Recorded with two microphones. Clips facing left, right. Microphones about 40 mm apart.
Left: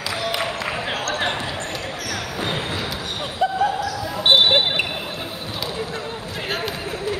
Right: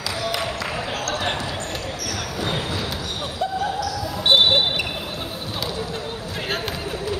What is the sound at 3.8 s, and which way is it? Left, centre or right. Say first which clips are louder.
Basketball bounce: left 2 dB; left.